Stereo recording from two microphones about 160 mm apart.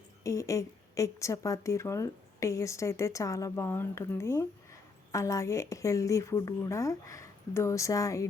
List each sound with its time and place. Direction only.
0.2 s a woman's voice: 20° left (ahead or behind)